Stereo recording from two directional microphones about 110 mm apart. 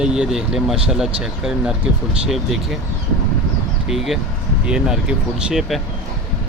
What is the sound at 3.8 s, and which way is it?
Speech, 5° right (ahead or behind).